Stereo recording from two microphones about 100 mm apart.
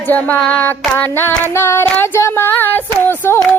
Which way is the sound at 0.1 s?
15° left (ahead or behind).